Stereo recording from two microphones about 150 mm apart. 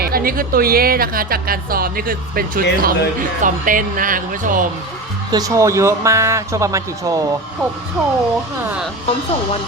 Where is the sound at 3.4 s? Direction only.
65° right (ahead or behind).